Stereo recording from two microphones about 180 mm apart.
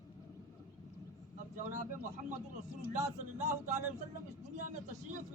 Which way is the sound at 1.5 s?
45° right (ahead or behind).